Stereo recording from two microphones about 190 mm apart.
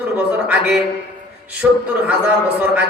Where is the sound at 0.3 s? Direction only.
10° right (ahead or behind).